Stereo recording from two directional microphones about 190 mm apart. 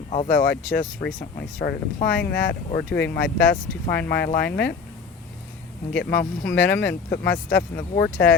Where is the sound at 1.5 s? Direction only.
45° left (ahead or behind).